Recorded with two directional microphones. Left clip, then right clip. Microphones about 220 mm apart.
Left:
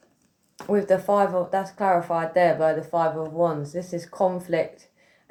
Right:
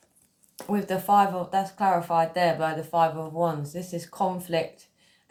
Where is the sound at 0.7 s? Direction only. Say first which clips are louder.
Left 3 dB; 20° right (ahead or behind).